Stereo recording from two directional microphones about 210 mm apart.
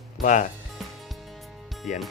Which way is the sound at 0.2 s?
35° left (ahead or behind).